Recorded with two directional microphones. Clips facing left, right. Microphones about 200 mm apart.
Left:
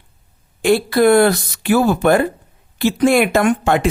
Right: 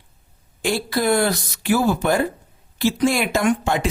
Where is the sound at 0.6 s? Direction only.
60° left (ahead or behind).